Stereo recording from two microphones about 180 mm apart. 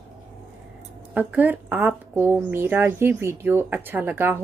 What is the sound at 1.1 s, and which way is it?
A woman's voice, 10° right (ahead or behind).